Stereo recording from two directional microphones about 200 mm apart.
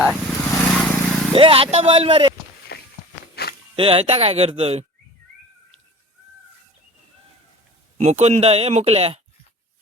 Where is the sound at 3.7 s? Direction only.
30° right (ahead or behind).